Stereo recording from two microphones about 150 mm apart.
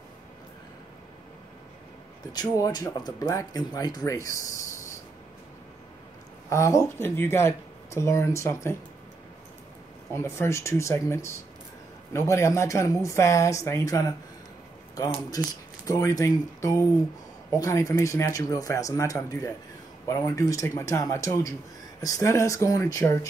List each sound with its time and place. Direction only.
2.3 s speech: 25° left (ahead or behind)
6.5 s speech: 20° left (ahead or behind)
10.1 s speech: 20° left (ahead or behind)
15.3 s speech: 20° left (ahead or behind)